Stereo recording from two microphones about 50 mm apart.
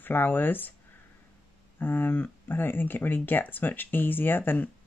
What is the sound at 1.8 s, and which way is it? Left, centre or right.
Speech, left.